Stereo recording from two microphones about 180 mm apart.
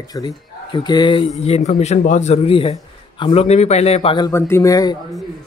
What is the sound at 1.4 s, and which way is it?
Speech, 35° left (ahead or behind).